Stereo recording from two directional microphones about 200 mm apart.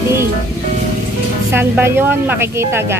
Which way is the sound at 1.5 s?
10° right (ahead or behind).